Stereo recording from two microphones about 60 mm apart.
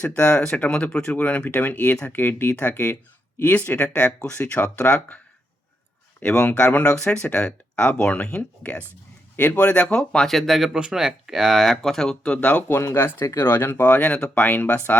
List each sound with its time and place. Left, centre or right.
0.0 s speech: centre
3.9 s speech: left
10.2 s speech: centre; by 12.6 s left
13.0 s speech: left
13.9 s speech: left